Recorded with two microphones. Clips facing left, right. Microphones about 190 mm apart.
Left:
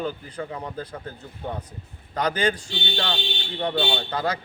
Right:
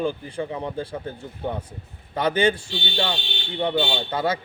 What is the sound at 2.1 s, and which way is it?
Speech, 25° right (ahead or behind).